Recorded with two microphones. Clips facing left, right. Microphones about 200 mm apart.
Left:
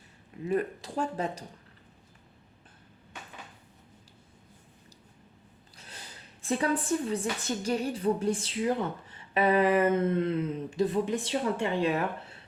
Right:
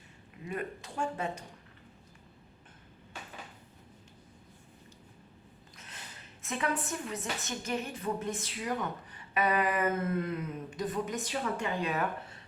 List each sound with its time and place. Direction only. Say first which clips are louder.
0.4 s speech: left 8 dB; 35° left (ahead or behind)
5.7 s a woman's voice: left 2 dB; 35° left (ahead or behind)